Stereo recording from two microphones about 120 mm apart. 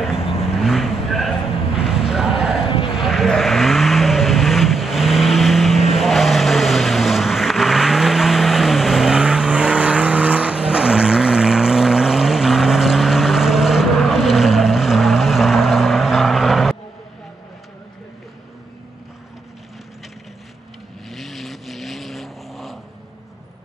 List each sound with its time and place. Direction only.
0.0 s vehicle: 5° right (ahead or behind)
2.1 s clip-clop: 5° right (ahead or behind)
2.6 s vehicle: 50° left (ahead or behind)
3.0 s vehicle: centre (ahead or behind)
21.1 s vehicle: centre (ahead or behind)